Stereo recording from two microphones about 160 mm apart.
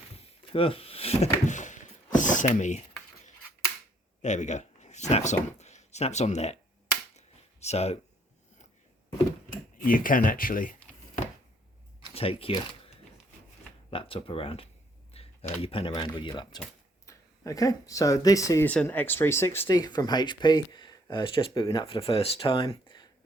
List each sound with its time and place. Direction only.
0.2 s a sound: 35° left (ahead or behind)
4.2 s speech: 45° left (ahead or behind)
7.2 s a sound: 40° left (ahead or behind)
9.8 s speech: 60° left (ahead or behind)
12.0 s speech: 35° left (ahead or behind)
13.9 s speech: 35° left (ahead or behind)
15.1 s a sound: 40° left (ahead or behind)
15.6 s speech: 35° left (ahead or behind); by 18.7 s 20° left (ahead or behind)
18.7 s speech: 10° left (ahead or behind); by 23.0 s 30° left (ahead or behind)